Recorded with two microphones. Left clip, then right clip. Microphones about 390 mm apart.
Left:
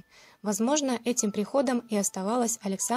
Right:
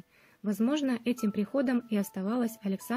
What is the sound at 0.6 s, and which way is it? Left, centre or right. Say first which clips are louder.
Speech: left 3 dB; centre.